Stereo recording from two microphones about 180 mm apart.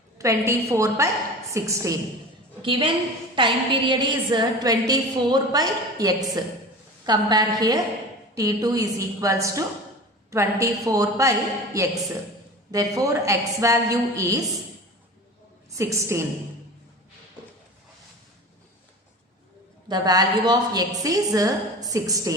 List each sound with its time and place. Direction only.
0.2 s a woman's voice: 15° right (ahead or behind)
2.6 s a woman's voice: 30° right (ahead or behind)
15.7 s a woman's voice: 15° right (ahead or behind)
19.9 s a woman's voice: 20° right (ahead or behind)